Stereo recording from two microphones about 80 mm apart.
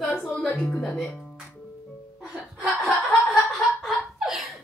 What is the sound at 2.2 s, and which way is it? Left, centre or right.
Chuckle, centre.